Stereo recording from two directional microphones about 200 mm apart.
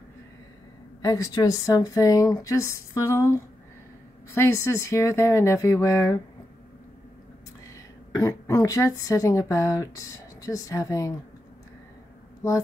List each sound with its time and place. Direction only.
1.0 s speech: 15° left (ahead or behind)
4.6 s speech: 15° left (ahead or behind)
8.2 s speech: 15° left (ahead or behind)